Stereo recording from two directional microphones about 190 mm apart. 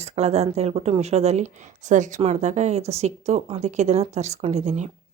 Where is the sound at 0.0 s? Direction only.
35° right (ahead or behind).